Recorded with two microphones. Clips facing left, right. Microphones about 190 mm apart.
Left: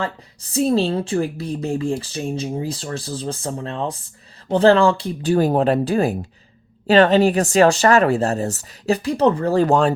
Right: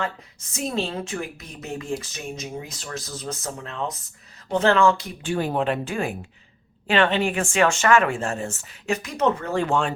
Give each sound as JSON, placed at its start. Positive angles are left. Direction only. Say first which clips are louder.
{"t": 0.0, "sound": "speech", "louder": "left 3 dB", "side_deg": 35}